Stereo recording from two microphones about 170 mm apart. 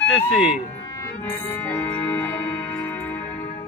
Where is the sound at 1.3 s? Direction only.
10° left (ahead or behind).